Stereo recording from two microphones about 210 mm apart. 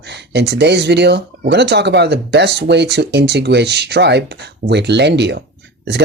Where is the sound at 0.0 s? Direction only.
55° right (ahead or behind).